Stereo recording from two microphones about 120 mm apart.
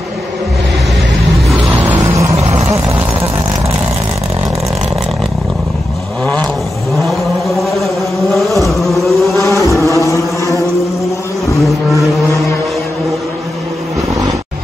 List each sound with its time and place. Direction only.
1.7 s vehicle: 15° right (ahead or behind)
6.2 s vehicle: 10° left (ahead or behind)
7.0 s vehicle: centre (ahead or behind)
8.6 s a sound: centre (ahead or behind)
9.4 s a sound: 25° left (ahead or behind)
11.5 s music: centre (ahead or behind)